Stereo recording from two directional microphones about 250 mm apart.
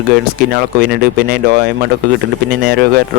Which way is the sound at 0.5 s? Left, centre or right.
Right.